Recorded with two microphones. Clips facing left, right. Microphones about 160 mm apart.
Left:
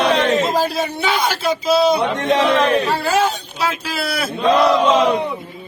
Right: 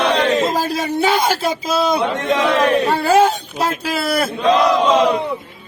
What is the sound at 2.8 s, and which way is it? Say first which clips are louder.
Speech: right 4 dB; 50° right (ahead or behind).